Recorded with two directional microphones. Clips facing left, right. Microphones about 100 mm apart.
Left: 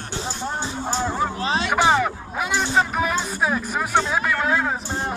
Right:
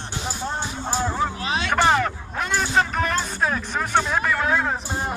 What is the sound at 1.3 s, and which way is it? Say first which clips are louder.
Music: left 3 dB; 30° left (ahead or behind).